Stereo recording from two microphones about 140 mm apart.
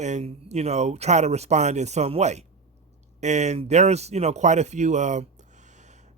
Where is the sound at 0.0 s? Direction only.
55° right (ahead or behind).